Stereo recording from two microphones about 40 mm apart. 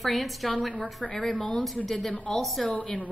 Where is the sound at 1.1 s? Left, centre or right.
Centre.